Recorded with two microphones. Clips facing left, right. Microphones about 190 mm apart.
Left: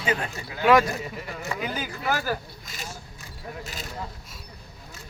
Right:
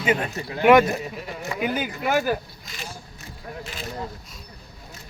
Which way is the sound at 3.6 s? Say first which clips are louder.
Right 3 dB; 40° left (ahead or behind).